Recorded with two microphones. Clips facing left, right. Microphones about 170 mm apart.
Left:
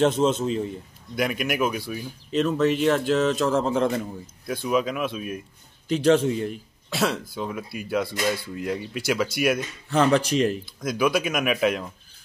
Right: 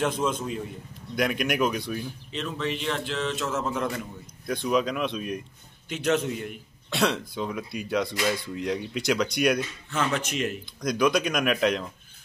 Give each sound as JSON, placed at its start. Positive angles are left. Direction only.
{"t": 0.0, "sound": "a man's voice", "side_deg": 25}
{"t": 1.1, "sound": "speech", "side_deg": 0}
{"t": 2.3, "sound": "a man's voice", "side_deg": 45}
{"t": 4.5, "sound": "speech", "side_deg": 5}
{"t": 5.9, "sound": "a man's voice", "side_deg": 35}
{"t": 6.9, "sound": "speech", "side_deg": 0}
{"t": 9.8, "sound": "a man's voice", "side_deg": 35}
{"t": 10.6, "sound": "speech", "side_deg": 5}